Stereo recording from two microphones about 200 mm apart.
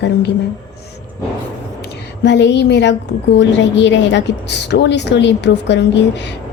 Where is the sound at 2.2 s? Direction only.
60° left (ahead or behind).